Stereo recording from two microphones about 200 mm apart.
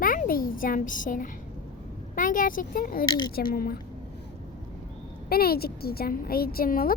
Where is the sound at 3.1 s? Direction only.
20° left (ahead or behind).